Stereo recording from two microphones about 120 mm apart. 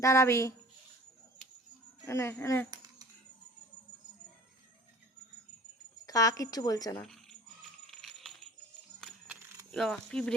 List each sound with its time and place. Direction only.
0.0 s a woman's voice: 25° left (ahead or behind)
2.0 s a woman's voice: 25° left (ahead or behind)
2.6 s a sound: 35° right (ahead or behind)
6.1 s a woman's voice: 30° left (ahead or behind)
7.0 s cricket: centre (ahead or behind)
7.9 s rattle: centre (ahead or behind)
9.2 s keys jangling: 15° right (ahead or behind)
9.7 s speech: 5° left (ahead or behind)